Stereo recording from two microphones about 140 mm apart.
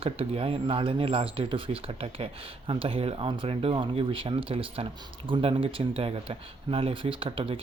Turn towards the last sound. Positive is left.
turn(degrees=-40)  # may be behind; listen again after turning